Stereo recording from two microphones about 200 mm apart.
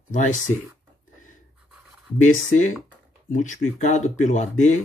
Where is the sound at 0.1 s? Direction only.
40° left (ahead or behind).